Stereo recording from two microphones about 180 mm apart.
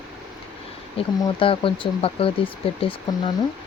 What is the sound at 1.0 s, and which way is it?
Speech, 30° left (ahead or behind).